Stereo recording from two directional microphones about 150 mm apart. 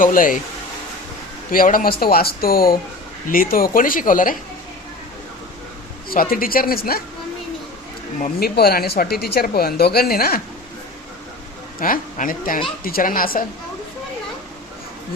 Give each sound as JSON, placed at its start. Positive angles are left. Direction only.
{"t": 0.0, "sound": "speech", "side_deg": 65}
{"t": 1.5, "sound": "speech", "side_deg": 70}
{"t": 6.3, "sound": "speech", "side_deg": 70}
{"t": 8.4, "sound": "speech", "side_deg": 90}
{"t": 11.8, "sound": "speech", "side_deg": 65}